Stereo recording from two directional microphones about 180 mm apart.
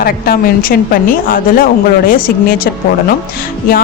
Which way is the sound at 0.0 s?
55° left (ahead or behind).